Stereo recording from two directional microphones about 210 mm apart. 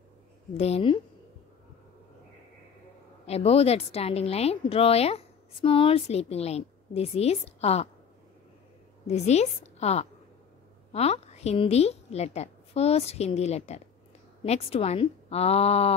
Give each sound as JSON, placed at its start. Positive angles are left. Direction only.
{"t": 0.6, "sound": "a woman's voice", "side_deg": 30}
{"t": 3.3, "sound": "a woman's voice", "side_deg": 30}
{"t": 9.0, "sound": "a woman's voice", "side_deg": 30}